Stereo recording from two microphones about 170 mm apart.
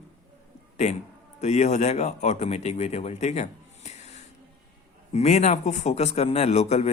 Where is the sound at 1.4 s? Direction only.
40° left (ahead or behind).